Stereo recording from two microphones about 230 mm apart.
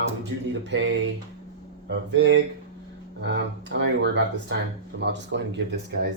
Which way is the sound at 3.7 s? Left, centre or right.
Right.